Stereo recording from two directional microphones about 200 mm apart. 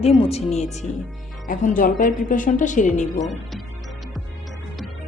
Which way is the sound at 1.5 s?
45° left (ahead or behind).